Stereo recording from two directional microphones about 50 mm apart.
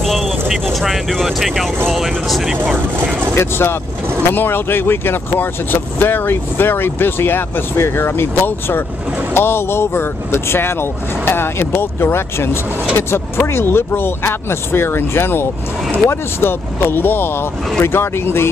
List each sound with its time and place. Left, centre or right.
0.0 s vehicle: centre
0.7 s speech: centre
2.7 s vehicle: right
3.3 s speech: left
8.0 s speech: left